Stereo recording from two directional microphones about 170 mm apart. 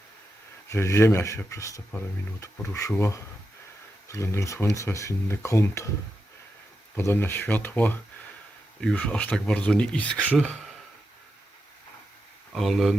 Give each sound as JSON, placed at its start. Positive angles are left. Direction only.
{"t": 0.7, "sound": "speech", "side_deg": 15}
{"t": 6.9, "sound": "speech", "side_deg": 15}
{"t": 12.5, "sound": "speech", "side_deg": 0}